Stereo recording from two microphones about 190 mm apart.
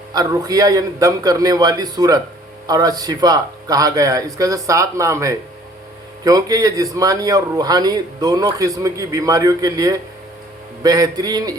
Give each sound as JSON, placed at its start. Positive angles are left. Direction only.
{"t": 0.1, "sound": "a man's voice", "side_deg": -20}